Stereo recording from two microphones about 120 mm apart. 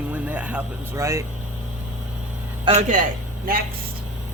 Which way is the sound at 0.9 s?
25° right (ahead or behind).